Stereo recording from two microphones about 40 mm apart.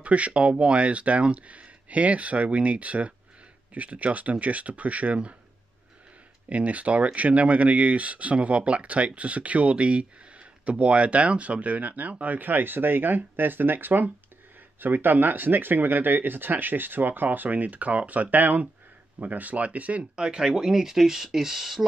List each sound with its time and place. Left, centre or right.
0.0 s speech: right
6.5 s speech: right
20.0 s speech: right